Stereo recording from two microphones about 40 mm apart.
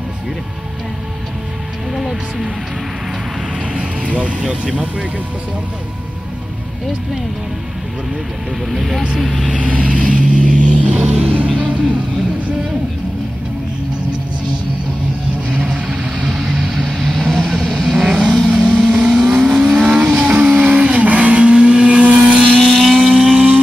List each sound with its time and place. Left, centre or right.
2.0 s music: centre
3.7 s music: right
8.6 s speech: centre
9.5 s vehicle: right
15.7 s vehicle: right
16.2 s vehicle: centre
20.5 s vehicle: right
22.5 s vehicle: centre
23.0 s vehicle: centre